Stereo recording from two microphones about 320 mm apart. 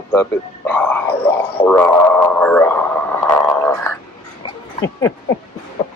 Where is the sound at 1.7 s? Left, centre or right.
Centre.